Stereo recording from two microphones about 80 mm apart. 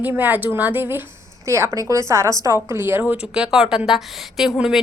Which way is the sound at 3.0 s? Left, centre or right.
Centre.